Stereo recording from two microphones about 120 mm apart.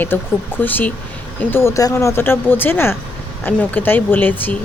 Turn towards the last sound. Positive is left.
turn(degrees=15)  # may be behind; listen again after turning